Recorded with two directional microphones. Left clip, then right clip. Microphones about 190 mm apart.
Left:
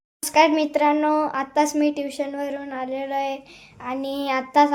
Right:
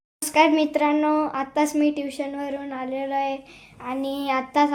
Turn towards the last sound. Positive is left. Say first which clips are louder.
# left 3 dB
turn(degrees=10)  # may be behind; listen again after turning